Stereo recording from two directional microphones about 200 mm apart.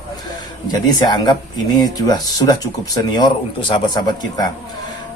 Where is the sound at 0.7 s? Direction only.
20° left (ahead or behind).